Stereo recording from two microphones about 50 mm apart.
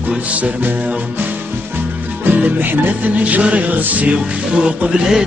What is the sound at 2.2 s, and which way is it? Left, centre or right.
Music, right.